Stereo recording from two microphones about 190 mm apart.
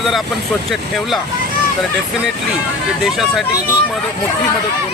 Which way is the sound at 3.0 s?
Centre (ahead or behind).